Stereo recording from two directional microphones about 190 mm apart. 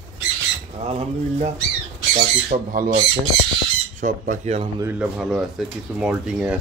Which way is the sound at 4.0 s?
40° right (ahead or behind).